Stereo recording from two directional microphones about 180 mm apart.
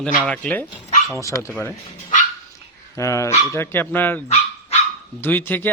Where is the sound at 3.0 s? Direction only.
15° left (ahead or behind).